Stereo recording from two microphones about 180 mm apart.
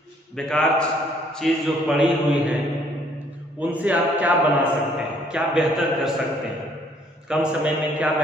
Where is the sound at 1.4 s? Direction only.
Centre (ahead or behind).